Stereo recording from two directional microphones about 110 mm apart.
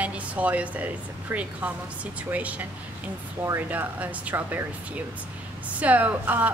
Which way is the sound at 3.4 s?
20° right (ahead or behind).